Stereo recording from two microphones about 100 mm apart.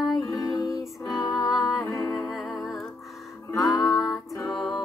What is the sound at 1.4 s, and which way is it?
Music, centre (ahead or behind).